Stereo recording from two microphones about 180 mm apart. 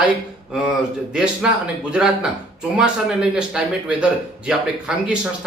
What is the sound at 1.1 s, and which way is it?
Speech, 5° right (ahead or behind).